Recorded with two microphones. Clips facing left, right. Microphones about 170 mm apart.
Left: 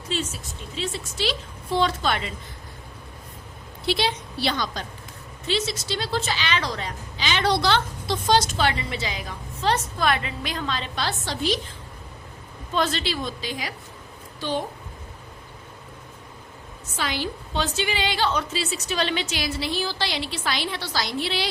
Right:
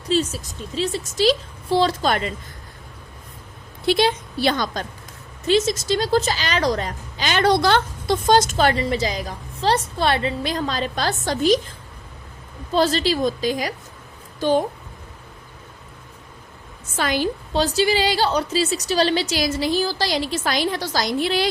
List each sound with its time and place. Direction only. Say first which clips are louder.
0.1 s a woman's voice: right 8 dB; 40° right (ahead or behind)
3.8 s a woman's voice: right 6 dB; 50° right (ahead or behind)
12.7 s a woman's voice: right 6 dB; 35° right (ahead or behind)
17.0 s a woman's voice: right 7 dB; 45° right (ahead or behind)